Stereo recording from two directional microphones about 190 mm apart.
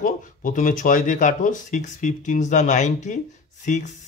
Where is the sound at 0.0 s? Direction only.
45° left (ahead or behind).